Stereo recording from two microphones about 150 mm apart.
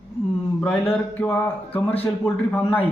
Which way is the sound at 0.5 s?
10° left (ahead or behind).